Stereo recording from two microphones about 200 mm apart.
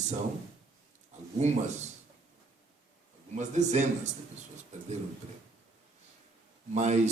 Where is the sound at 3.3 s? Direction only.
35° right (ahead or behind).